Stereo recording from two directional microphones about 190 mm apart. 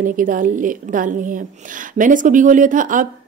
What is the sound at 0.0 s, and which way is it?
A woman's voice, 45° right (ahead or behind).